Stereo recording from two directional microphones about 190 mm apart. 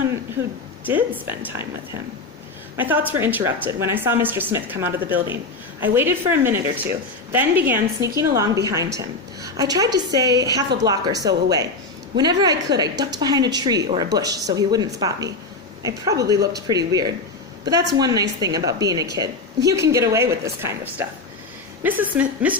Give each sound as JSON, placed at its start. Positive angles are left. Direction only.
{"t": 0.9, "sound": "a woman's voice", "side_deg": -10}
{"t": 2.7, "sound": "a woman's voice", "side_deg": -10}
{"t": 16.3, "sound": "a woman's voice", "side_deg": -20}